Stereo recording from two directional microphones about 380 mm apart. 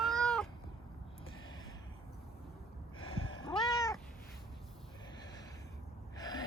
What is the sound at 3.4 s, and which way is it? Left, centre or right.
Cat, centre.